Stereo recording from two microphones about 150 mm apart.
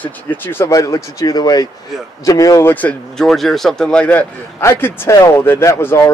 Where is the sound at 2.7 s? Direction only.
5° left (ahead or behind).